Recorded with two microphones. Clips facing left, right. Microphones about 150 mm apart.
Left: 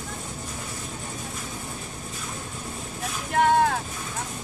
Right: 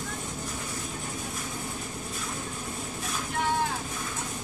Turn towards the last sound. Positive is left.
turn(degrees=65)  # may be behind; listen again after turning